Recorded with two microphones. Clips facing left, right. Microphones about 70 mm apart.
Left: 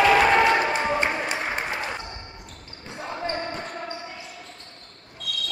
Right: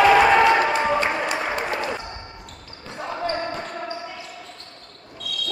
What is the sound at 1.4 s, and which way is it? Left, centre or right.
Applause, right.